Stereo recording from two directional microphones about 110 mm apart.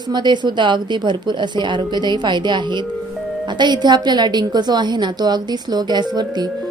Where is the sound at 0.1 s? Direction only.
45° right (ahead or behind).